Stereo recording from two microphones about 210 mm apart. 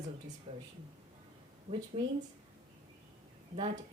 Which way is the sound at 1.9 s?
25° right (ahead or behind).